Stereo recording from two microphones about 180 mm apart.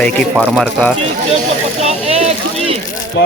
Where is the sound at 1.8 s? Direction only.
35° right (ahead or behind).